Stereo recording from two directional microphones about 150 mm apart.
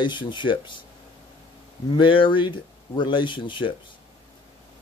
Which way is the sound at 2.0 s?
35° left (ahead or behind).